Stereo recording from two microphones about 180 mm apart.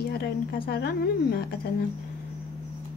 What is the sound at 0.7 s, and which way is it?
Speech, 60° left (ahead or behind).